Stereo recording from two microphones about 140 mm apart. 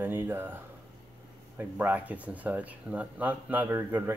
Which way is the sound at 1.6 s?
10° right (ahead or behind).